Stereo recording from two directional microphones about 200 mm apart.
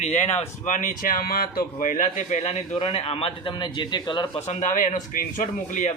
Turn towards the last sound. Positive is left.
turn(degrees=40)  # may be behind; listen again after turning